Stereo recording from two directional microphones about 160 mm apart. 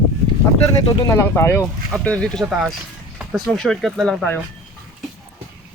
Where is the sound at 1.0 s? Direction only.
15° left (ahead or behind).